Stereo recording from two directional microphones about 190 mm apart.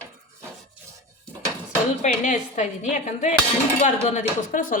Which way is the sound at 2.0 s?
40° left (ahead or behind).